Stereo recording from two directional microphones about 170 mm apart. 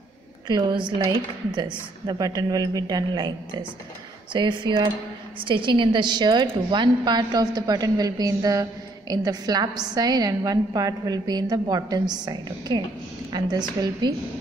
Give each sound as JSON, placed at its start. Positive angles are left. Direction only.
{"t": 0.5, "sound": "a woman's voice", "side_deg": -25}